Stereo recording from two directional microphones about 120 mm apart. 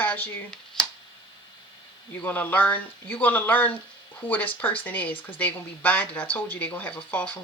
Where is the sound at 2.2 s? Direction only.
15° left (ahead or behind).